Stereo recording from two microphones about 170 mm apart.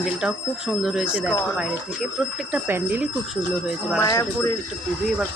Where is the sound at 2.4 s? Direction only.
5° right (ahead or behind).